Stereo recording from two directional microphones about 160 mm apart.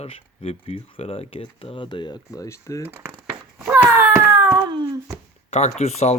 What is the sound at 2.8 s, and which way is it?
Speech, 10° right (ahead or behind).